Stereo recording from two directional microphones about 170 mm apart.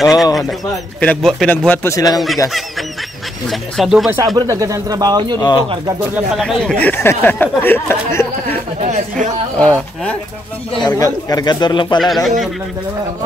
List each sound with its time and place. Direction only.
1.0 s speech: 5° left (ahead or behind)
2.1 s speech: centre (ahead or behind)
3.4 s speech: centre (ahead or behind)
4.4 s speech: 20° right (ahead or behind)
5.4 s speech: 25° left (ahead or behind)
6.4 s speech: 5° left (ahead or behind)
9.6 s speech: 5° left (ahead or behind)
10.9 s speech: 15° left (ahead or behind)
12.0 s speech: centre (ahead or behind)